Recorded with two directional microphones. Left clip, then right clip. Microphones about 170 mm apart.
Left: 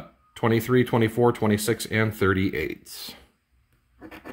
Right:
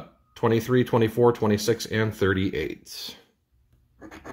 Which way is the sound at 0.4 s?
20° left (ahead or behind).